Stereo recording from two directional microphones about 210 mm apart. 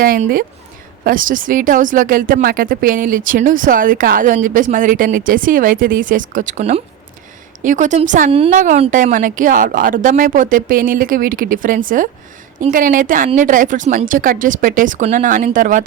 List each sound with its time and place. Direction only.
0.0 s speech: 45° right (ahead or behind)